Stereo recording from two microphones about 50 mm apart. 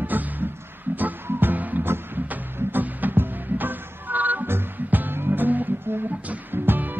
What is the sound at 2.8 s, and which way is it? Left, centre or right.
Music, right.